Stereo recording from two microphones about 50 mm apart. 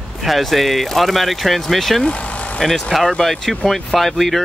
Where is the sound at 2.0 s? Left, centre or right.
Left.